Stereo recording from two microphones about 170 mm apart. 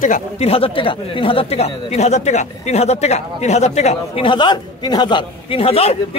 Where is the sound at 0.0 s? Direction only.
45° left (ahead or behind).